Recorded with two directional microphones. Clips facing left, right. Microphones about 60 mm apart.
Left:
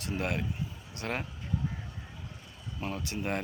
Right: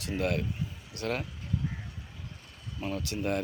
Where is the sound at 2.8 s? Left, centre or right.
Left.